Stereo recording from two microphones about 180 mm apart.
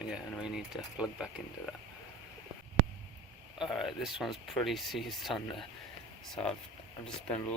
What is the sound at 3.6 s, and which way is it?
Speech, centre (ahead or behind).